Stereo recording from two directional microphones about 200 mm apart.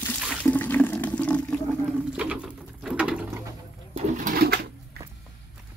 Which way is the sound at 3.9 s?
35° right (ahead or behind).